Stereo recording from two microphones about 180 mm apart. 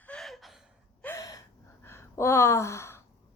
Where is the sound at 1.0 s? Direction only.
20° left (ahead or behind).